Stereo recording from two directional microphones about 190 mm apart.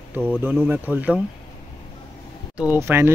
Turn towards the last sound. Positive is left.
turn(degrees=-10)  # may be behind; listen again after turning